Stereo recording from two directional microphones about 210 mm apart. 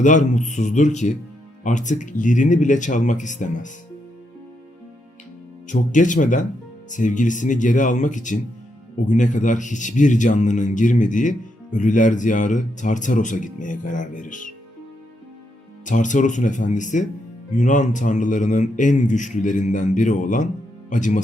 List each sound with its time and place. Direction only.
0.0 s speech: 35° left (ahead or behind)
5.6 s speech: 35° left (ahead or behind)
15.9 s speech: 35° left (ahead or behind)